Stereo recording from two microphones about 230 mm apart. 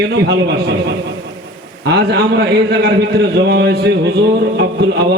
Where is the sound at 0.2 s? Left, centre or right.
Right.